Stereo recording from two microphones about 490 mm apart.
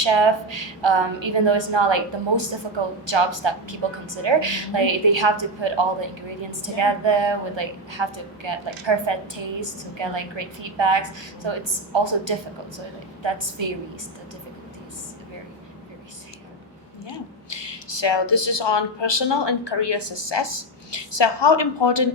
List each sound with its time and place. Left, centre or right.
0.0 s a woman's voice: right
17.5 s speech: left